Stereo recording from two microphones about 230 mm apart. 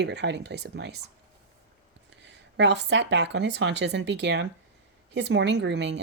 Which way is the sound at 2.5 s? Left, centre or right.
Right.